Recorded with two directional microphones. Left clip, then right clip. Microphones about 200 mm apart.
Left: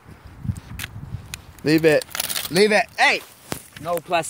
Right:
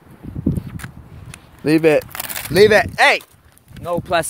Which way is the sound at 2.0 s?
10° left (ahead or behind).